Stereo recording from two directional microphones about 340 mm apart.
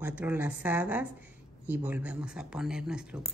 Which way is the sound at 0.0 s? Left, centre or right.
Centre.